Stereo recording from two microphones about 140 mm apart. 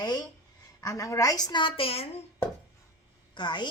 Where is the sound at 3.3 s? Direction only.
35° left (ahead or behind).